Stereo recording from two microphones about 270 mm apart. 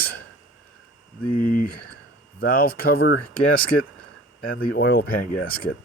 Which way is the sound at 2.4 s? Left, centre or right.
Left.